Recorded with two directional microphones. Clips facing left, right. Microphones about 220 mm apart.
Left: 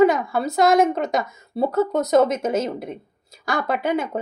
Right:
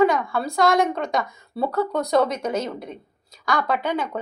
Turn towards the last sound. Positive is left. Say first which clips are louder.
# left 2 dB
turn(degrees=25)  # may be behind; listen again after turning